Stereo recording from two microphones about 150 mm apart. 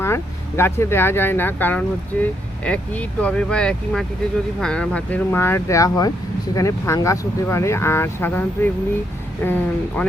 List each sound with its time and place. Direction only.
0.0 s speech: 15° left (ahead or behind)